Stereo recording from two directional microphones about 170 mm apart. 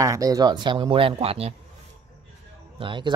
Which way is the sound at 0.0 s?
20° right (ahead or behind).